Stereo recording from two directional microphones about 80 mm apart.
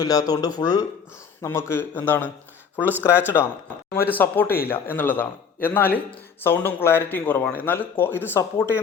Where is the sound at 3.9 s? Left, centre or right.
Left.